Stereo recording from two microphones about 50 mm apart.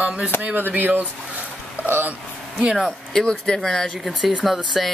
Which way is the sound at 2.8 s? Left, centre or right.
Centre.